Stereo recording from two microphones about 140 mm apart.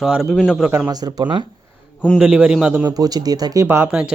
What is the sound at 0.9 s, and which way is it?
Speech, 30° right (ahead or behind).